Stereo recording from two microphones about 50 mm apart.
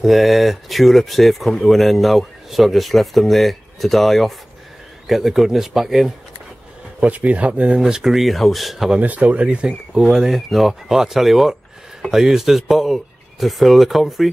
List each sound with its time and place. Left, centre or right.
0.0 s speech: centre
7.1 s speech: right
7.8 s speech: centre
9.0 s speech: right
9.7 s speech: centre